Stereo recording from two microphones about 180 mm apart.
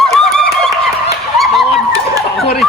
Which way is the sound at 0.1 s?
Centre (ahead or behind).